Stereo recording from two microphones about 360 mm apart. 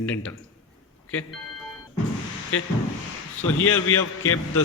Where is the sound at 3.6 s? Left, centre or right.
Left.